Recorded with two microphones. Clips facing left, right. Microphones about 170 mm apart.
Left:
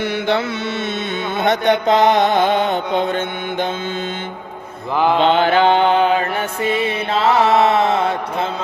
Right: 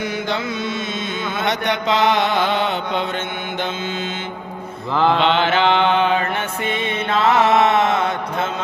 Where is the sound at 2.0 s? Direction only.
20° left (ahead or behind).